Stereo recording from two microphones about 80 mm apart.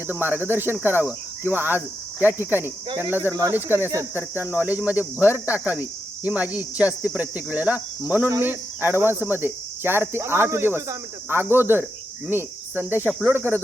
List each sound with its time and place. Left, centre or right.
0.1 s cricket: right